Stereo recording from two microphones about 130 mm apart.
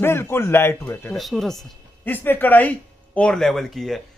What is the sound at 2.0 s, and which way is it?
A man's voice, 15° left (ahead or behind).